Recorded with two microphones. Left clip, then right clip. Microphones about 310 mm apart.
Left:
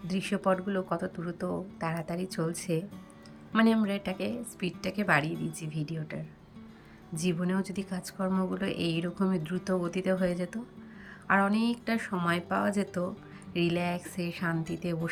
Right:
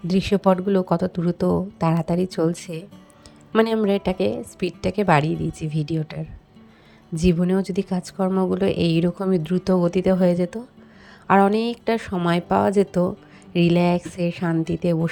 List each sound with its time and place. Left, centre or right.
0.1 s a woman's voice: centre